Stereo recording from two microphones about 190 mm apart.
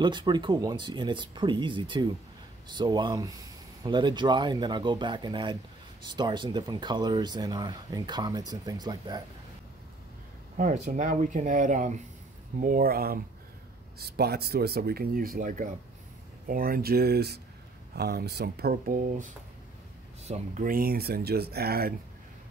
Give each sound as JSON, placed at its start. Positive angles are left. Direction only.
{"t": 0.0, "sound": "speech", "side_deg": -25}
{"t": 10.6, "sound": "speech", "side_deg": -40}